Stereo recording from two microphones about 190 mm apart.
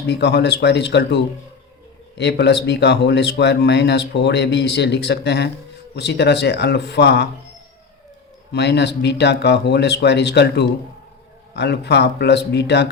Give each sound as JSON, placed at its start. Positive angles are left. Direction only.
{"t": 0.1, "sound": "speech", "side_deg": 60}
{"t": 8.5, "sound": "speech", "side_deg": 65}